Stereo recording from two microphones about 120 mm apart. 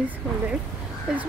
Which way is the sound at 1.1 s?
5° right (ahead or behind).